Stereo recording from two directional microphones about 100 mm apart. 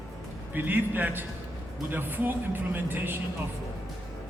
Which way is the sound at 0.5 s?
20° right (ahead or behind).